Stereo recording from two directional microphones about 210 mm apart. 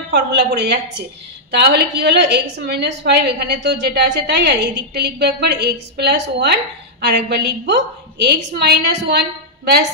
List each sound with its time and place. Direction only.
0.1 s a woman's voice: 50° right (ahead or behind)